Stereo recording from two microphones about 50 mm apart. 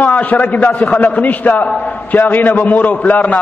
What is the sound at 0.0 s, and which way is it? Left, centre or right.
A man's voice, left.